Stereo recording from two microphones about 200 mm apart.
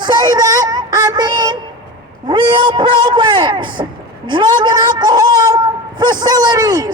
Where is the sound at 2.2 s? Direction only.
25° right (ahead or behind).